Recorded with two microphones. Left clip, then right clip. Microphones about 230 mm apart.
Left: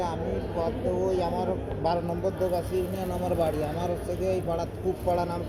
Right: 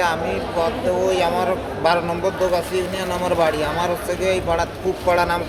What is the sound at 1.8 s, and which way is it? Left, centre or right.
Speech, right.